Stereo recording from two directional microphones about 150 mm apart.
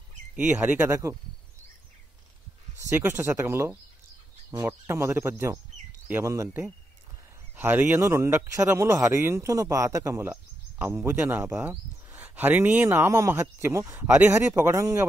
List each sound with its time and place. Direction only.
0.4 s a man's voice: 10° right (ahead or behind)
2.9 s a man's voice: 15° right (ahead or behind)